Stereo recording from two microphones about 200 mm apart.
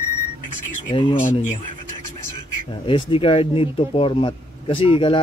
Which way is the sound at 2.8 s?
25° left (ahead or behind).